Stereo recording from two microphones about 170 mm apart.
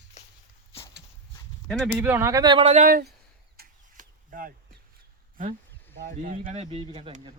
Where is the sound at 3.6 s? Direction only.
55° right (ahead or behind).